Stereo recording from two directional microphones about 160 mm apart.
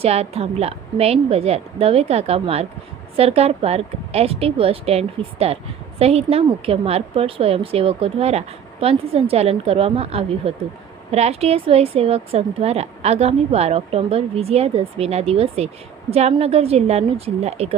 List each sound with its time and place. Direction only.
0.0 s a woman's voice: 40° right (ahead or behind)